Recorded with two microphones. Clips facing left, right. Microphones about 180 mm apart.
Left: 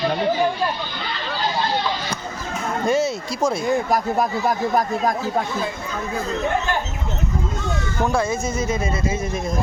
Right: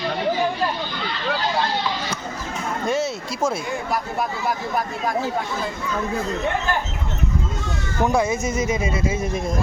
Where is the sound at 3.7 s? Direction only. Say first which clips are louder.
Left 6 dB; 40° left (ahead or behind).